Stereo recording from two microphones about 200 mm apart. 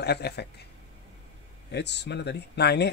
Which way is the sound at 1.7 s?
60° left (ahead or behind).